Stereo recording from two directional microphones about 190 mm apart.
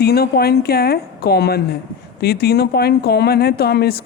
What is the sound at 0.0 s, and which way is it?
Speech, 55° left (ahead or behind).